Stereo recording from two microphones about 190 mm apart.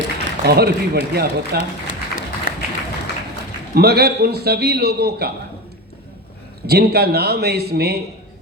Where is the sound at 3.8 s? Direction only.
55° right (ahead or behind).